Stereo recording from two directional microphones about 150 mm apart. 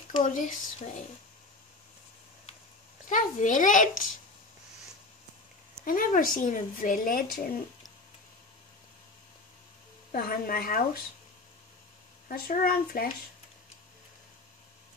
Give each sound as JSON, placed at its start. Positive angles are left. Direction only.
{"t": 0.2, "sound": "speech", "side_deg": 60}
{"t": 3.1, "sound": "speech", "side_deg": 60}
{"t": 5.9, "sound": "speech", "side_deg": 70}
{"t": 10.1, "sound": "speech", "side_deg": 75}
{"t": 12.3, "sound": "speech", "side_deg": 70}